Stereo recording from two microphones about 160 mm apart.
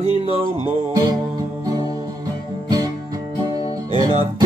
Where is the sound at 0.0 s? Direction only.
40° right (ahead or behind).